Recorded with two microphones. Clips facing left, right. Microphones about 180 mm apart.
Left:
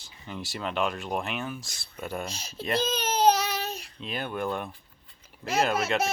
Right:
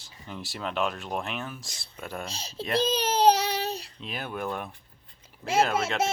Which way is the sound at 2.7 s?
35° right (ahead or behind).